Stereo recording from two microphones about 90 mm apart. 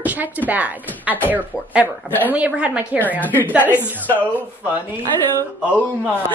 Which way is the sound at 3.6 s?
25° left (ahead or behind).